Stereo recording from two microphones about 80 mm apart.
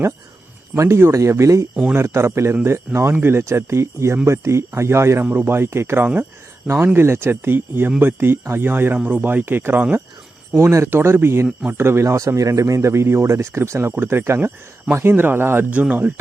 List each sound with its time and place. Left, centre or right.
0.8 s speech: right
15.7 s speech: centre